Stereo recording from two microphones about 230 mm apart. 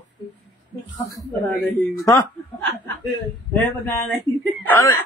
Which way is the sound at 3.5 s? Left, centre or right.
Centre.